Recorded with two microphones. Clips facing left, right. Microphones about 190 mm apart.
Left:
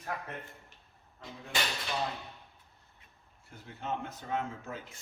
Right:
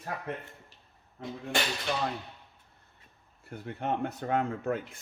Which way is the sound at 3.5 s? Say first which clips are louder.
Right 6 dB; 60° right (ahead or behind).